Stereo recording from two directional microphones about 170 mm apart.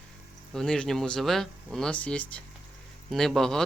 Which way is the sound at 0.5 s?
5° left (ahead or behind).